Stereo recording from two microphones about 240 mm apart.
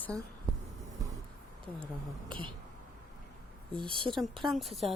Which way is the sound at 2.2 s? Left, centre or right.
Centre.